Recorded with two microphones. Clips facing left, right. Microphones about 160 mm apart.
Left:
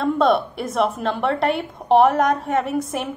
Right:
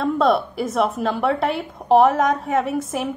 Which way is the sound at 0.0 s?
Centre (ahead or behind).